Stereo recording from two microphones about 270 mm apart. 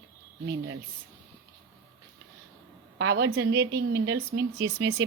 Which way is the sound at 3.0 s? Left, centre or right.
Right.